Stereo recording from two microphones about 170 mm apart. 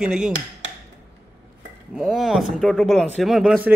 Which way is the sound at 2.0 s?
Centre (ahead or behind).